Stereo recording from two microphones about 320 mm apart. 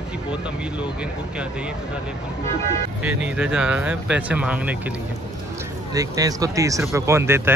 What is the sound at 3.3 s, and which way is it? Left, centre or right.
Speech, centre.